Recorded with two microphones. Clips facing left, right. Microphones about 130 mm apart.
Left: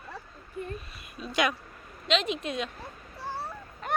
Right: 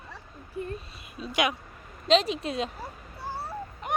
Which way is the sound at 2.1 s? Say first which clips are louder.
Right 5 dB; 35° right (ahead or behind).